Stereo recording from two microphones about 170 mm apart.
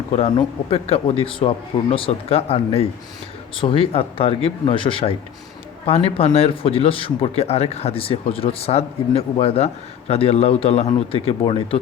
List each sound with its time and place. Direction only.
0.1 s speech: 35° left (ahead or behind)